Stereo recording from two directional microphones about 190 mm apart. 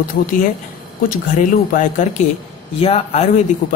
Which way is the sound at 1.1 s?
45° left (ahead or behind).